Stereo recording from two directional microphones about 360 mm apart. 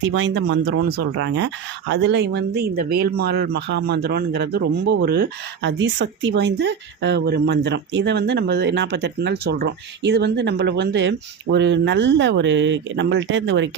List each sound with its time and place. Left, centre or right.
0.0 s speech: right